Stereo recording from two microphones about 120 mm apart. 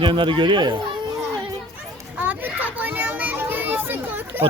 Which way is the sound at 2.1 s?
15° right (ahead or behind).